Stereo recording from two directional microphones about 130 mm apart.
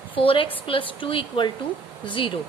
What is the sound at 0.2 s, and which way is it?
A woman's voice, 40° left (ahead or behind).